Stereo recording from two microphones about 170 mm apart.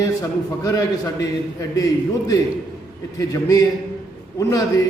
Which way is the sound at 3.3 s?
20° left (ahead or behind).